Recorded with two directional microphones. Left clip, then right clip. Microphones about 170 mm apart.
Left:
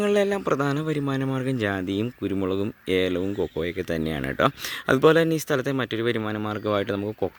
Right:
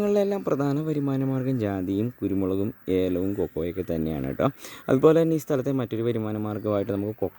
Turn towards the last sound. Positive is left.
turn(degrees=20)  # may be behind; listen again after turning